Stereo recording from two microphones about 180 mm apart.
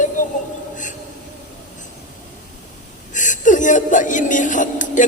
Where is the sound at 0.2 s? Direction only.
45° left (ahead or behind).